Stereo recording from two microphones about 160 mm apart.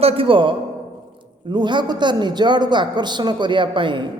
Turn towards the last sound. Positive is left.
turn(degrees=-30)  # may be behind; listen again after turning